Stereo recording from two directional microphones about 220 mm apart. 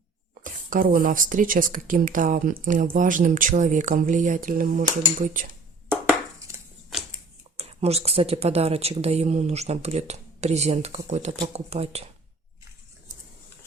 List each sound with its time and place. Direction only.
0.4 s speech: 40° right (ahead or behind)
5.9 s a sound: 10° right (ahead or behind)
7.5 s speech: 25° right (ahead or behind)